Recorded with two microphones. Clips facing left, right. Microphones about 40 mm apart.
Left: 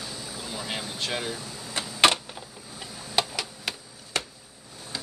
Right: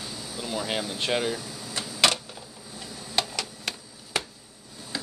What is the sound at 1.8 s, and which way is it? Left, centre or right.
Typewriter, left.